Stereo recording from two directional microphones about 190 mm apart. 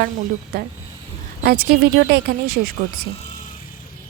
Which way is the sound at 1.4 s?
55° right (ahead or behind).